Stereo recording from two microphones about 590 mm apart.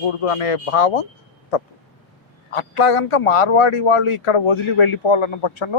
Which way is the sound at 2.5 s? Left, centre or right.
Left.